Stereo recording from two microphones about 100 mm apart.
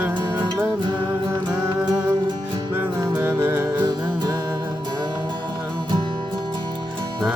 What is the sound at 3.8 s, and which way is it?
Music, 40° right (ahead or behind).